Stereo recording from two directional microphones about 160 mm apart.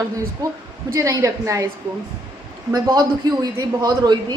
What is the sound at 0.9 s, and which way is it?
Speech, 20° right (ahead or behind).